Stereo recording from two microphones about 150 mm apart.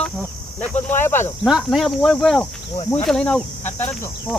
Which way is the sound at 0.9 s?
15° left (ahead or behind).